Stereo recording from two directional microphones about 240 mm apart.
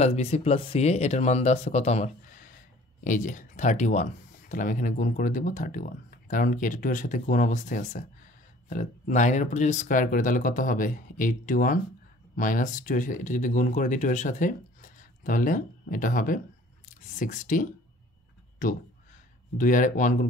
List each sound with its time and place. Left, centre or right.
0.0 s speech: left
19.5 s speech: left